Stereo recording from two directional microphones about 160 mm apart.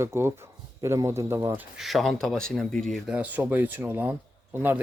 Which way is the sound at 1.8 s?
Centre (ahead or behind).